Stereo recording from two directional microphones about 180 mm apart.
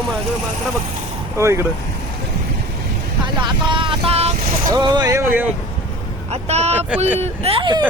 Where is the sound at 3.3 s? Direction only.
25° right (ahead or behind).